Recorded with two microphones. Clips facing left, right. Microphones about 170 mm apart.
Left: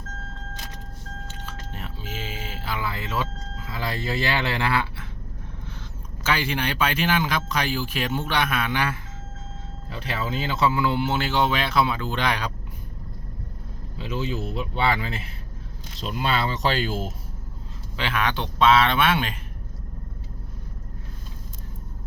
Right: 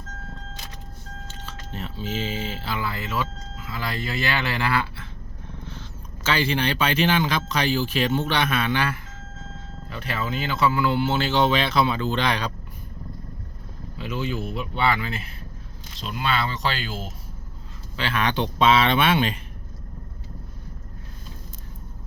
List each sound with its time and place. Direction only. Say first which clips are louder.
1.3 s speech: right 3 dB; 15° left (ahead or behind)
3.8 s speech: left 1 dB; 25° left (ahead or behind)
6.2 s speech: right 2 dB; 10° left (ahead or behind)
10.2 s speech: even; 30° left (ahead or behind); by 12.5 s 10° left (ahead or behind)
14.0 s speech: even; 30° left (ahead or behind); by 17.1 s 45° left (ahead or behind)
17.9 s speech: even; 20° left (ahead or behind)
18.2 s speech: right 1 dB; 5° left (ahead or behind)